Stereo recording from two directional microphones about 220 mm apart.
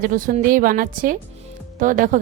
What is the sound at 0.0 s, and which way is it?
Speech, 35° right (ahead or behind).